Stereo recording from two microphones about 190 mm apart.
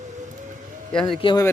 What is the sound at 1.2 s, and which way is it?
Speech, 25° left (ahead or behind).